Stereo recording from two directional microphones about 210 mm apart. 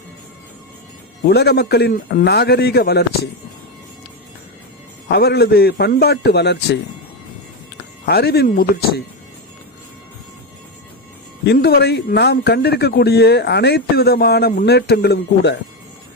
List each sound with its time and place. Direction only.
1.3 s speech: 50° left (ahead or behind)
5.0 s speech: 50° left (ahead or behind)
8.0 s speech: 50° left (ahead or behind)
11.4 s speech: 50° left (ahead or behind)